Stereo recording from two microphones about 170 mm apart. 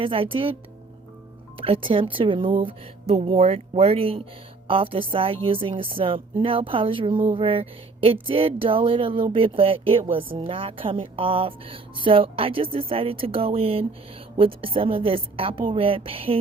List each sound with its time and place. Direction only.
0.0 s a woman's voice: 30° right (ahead or behind)
1.5 s a woman's voice: 30° right (ahead or behind)